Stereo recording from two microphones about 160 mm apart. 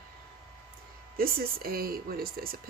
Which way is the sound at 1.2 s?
65° right (ahead or behind).